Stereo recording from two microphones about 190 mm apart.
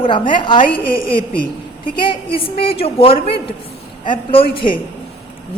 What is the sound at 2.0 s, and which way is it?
A woman's voice, 25° left (ahead or behind).